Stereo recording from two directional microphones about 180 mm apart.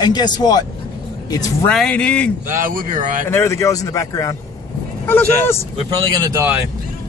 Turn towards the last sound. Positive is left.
turn(degrees=-20)  # may be behind; listen again after turning